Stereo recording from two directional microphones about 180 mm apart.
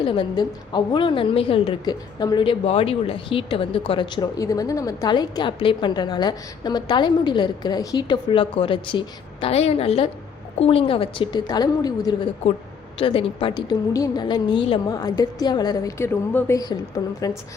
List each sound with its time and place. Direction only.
0.0 s a woman's voice: 30° left (ahead or behind)